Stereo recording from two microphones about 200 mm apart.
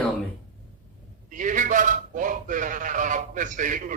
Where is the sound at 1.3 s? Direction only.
40° right (ahead or behind).